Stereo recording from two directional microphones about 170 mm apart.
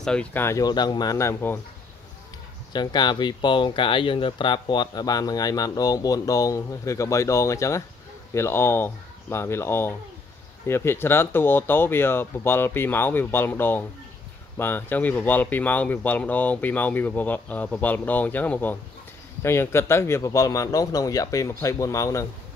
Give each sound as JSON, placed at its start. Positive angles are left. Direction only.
{"t": 0.0, "sound": "speech", "side_deg": 5}
{"t": 2.7, "sound": "speech", "side_deg": 25}